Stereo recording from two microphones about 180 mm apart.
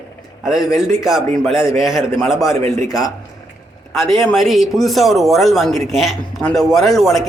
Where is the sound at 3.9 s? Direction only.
Centre (ahead or behind).